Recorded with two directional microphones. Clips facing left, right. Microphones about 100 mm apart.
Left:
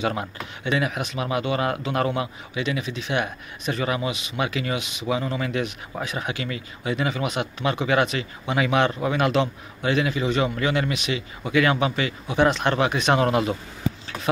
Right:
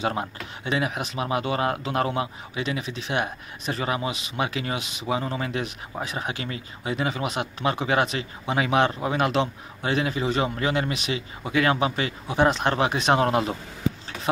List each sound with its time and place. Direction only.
0.0 s speech: 30° right (ahead or behind)